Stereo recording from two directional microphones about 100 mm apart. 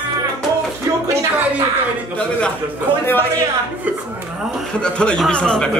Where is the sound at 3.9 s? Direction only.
15° right (ahead or behind).